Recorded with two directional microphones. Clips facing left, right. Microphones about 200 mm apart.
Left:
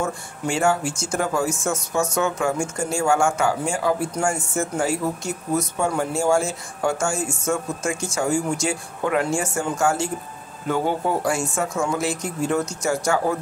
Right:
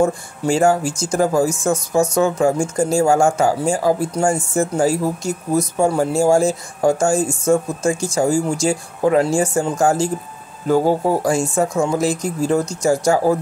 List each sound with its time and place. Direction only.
0.0 s speech: 35° right (ahead or behind)